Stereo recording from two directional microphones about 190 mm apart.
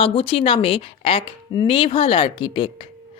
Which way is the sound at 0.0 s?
30° left (ahead or behind).